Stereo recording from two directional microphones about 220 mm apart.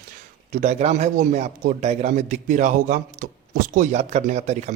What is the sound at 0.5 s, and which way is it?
A man's voice, 30° right (ahead or behind).